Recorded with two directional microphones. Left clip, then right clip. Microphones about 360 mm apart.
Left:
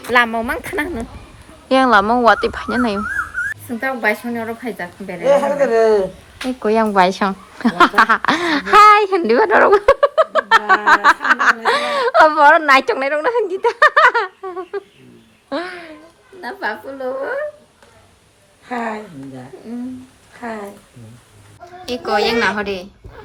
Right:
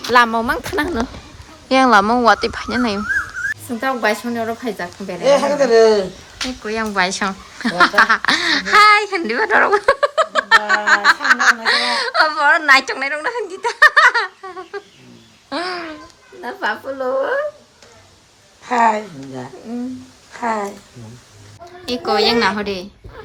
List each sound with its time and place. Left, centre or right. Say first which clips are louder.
0.0 s a woman's voice: right 2 dB; centre
15.7 s babbling: right 6 dB; centre
16.4 s a woman's voice: right 2 dB; centre
18.7 s a woman's voice: right 9 dB; centre
21.8 s a woman's voice: right 1 dB; centre